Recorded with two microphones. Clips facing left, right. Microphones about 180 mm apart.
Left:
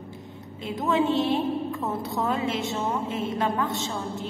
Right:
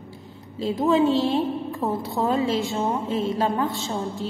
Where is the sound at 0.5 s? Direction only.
30° right (ahead or behind).